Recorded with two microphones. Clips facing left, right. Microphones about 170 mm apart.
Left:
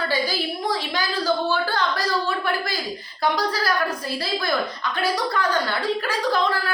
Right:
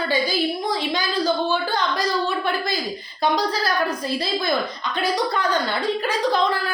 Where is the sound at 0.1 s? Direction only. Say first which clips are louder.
Right 3 dB; 20° right (ahead or behind).